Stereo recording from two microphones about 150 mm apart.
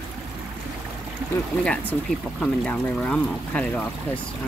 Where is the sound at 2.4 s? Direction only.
5° left (ahead or behind).